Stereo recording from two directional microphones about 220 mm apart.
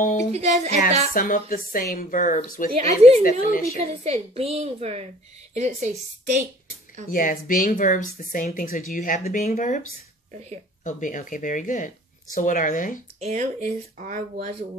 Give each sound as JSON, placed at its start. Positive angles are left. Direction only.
{"t": 0.2, "sound": "a woman's voice", "side_deg": -30}
{"t": 1.1, "sound": "speech", "side_deg": 40}
{"t": 2.7, "sound": "a woman's voice", "side_deg": -30}
{"t": 3.3, "sound": "speech", "side_deg": 40}
{"t": 3.9, "sound": "a woman's voice", "side_deg": -30}
{"t": 7.1, "sound": "speech", "side_deg": 40}
{"t": 10.8, "sound": "speech", "side_deg": 35}
{"t": 13.2, "sound": "speech", "side_deg": -30}